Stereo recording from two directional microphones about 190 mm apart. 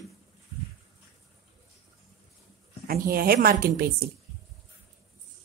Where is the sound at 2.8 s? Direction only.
50° right (ahead or behind).